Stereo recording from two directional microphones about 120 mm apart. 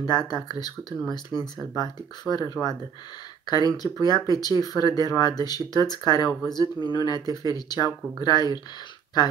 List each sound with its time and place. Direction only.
0.3 s speech: 35° left (ahead or behind)